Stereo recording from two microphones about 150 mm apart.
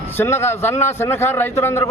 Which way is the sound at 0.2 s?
15° left (ahead or behind).